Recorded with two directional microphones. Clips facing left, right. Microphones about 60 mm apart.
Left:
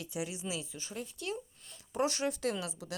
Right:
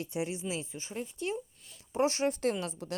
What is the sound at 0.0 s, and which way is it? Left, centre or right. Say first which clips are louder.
A woman's voice: right 4 dB; right.